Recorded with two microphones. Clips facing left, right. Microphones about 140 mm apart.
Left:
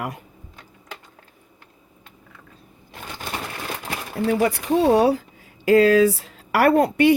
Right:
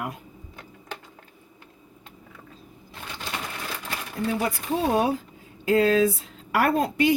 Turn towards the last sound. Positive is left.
turn(degrees=65)  # may be behind; listen again after turning